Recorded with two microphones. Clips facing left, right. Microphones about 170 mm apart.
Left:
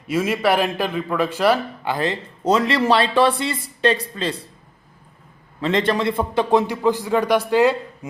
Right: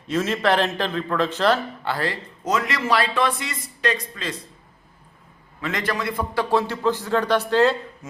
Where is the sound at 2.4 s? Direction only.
30° left (ahead or behind).